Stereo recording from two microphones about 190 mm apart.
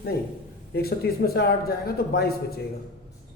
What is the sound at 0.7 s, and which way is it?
Speech, 55° left (ahead or behind).